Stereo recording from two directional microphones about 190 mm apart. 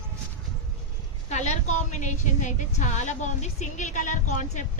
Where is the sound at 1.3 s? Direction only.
35° left (ahead or behind).